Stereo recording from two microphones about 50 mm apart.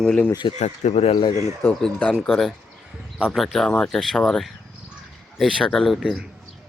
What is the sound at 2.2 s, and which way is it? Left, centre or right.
Speech, centre.